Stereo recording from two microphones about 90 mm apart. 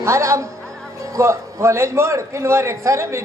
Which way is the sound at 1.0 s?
35° right (ahead or behind).